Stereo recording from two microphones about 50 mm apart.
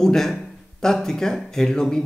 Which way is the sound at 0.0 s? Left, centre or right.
Centre.